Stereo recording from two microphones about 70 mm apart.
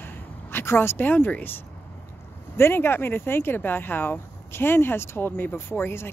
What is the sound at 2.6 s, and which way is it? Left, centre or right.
Speech, left.